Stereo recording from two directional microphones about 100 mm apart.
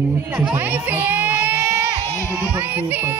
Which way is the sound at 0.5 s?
15° right (ahead or behind).